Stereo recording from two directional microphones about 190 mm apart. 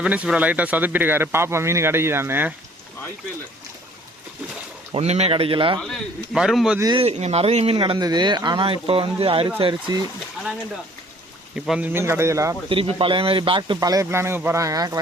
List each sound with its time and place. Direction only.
0.0 s speech: 5° right (ahead or behind)
4.9 s speech: 35° right (ahead or behind)
5.8 s a man's voice: centre (ahead or behind)
6.7 s speech: 20° right (ahead or behind)
7.0 s speech: 35° right (ahead or behind)
11.5 s speech: 5° right (ahead or behind)
12.6 s speech: 30° right (ahead or behind)